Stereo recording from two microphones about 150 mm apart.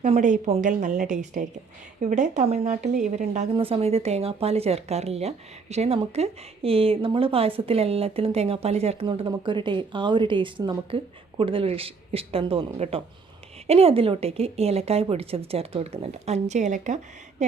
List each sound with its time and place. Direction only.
0.0 s a woman's voice: 50° right (ahead or behind)
3.5 s speech: 40° right (ahead or behind)